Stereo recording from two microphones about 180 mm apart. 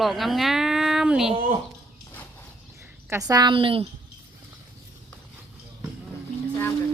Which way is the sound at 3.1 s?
20° right (ahead or behind).